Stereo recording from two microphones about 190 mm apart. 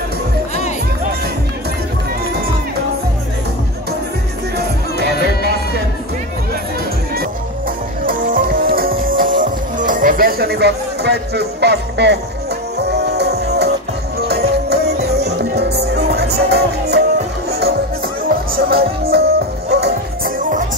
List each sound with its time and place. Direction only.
4.6 s music: 60° right (ahead or behind)
8.0 s music: 50° right (ahead or behind)
18.3 s music: 55° right (ahead or behind)